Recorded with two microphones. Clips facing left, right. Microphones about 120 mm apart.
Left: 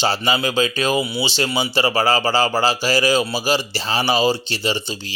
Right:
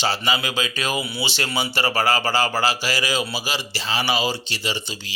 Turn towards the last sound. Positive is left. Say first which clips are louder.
# left 5 dB
turn(degrees=35)  # may be behind; listen again after turning